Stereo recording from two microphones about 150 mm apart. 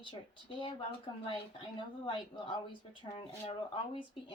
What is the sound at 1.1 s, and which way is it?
A woman's voice, 30° left (ahead or behind).